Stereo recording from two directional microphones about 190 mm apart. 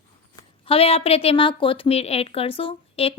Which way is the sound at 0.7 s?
30° left (ahead or behind).